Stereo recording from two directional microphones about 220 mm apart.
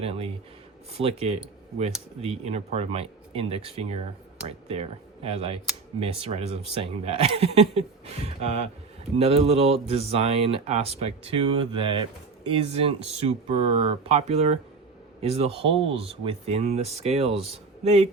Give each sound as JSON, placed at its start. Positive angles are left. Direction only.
{"t": 0.0, "sound": "speech", "side_deg": -25}